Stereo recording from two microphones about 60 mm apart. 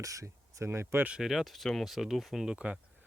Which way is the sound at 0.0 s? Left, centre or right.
Right.